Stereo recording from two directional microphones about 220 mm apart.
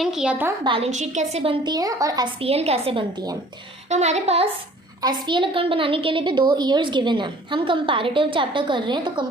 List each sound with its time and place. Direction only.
0.0 s a woman's voice: 5° right (ahead or behind)
0.6 s a woman's voice: 25° right (ahead or behind)
2.4 s a woman's voice: 25° right (ahead or behind)
3.8 s a woman's voice: 30° right (ahead or behind)